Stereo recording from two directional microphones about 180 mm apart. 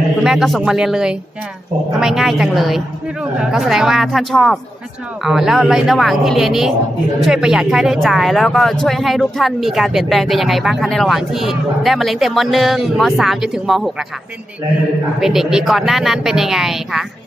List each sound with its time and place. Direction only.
0.2 s speech: centre (ahead or behind)
15.1 s speech: centre (ahead or behind)